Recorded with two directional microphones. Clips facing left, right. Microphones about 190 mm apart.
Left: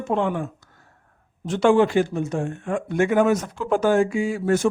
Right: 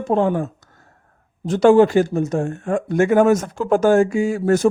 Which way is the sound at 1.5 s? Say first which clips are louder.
Right 5 dB; 40° right (ahead or behind).